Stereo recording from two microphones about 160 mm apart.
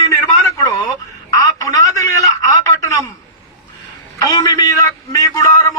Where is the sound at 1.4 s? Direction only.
20° left (ahead or behind).